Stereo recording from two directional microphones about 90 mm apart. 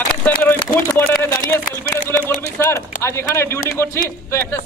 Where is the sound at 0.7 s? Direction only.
30° left (ahead or behind).